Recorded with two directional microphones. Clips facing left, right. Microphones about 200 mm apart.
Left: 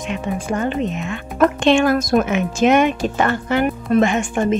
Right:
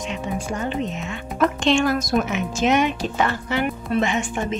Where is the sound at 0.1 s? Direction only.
55° left (ahead or behind).